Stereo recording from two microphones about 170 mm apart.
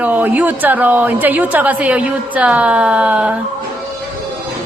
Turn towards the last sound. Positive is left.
turn(degrees=-5)  # may be behind; listen again after turning